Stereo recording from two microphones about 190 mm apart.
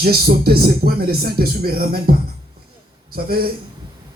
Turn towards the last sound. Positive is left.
turn(degrees=-50)  # may be behind; listen again after turning